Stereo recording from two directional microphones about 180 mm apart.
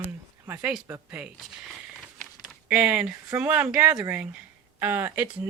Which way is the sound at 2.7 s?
5° right (ahead or behind).